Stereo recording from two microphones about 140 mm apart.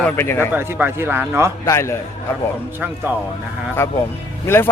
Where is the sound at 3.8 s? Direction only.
15° left (ahead or behind).